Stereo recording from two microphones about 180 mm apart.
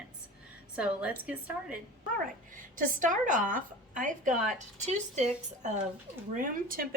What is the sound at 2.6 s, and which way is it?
A woman's voice, 50° right (ahead or behind).